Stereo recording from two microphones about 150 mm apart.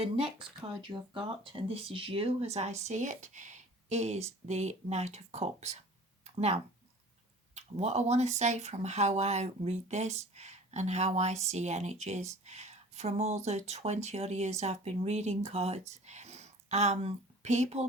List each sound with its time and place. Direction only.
0.9 s speech: 35° right (ahead or behind); by 17.8 s 50° right (ahead or behind)